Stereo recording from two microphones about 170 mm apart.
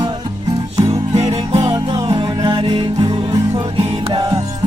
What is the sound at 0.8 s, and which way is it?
Music, 40° right (ahead or behind).